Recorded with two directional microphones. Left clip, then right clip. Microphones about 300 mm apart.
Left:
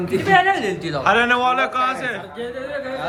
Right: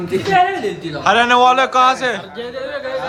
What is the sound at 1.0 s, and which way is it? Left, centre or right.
A man's voice, centre.